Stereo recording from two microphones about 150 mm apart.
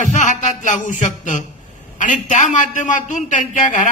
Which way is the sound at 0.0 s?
55° left (ahead or behind).